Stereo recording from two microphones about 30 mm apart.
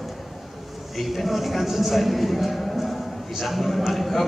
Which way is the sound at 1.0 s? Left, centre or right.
Centre.